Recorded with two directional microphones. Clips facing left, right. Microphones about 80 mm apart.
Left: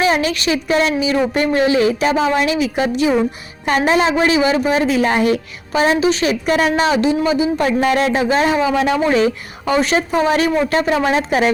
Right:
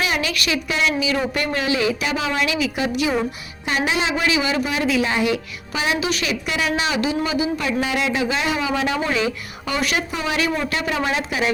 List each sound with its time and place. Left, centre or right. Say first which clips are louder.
0.0 s a woman's voice: left 7 dB; left